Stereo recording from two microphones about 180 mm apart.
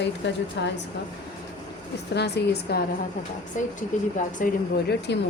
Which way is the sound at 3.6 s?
45° left (ahead or behind).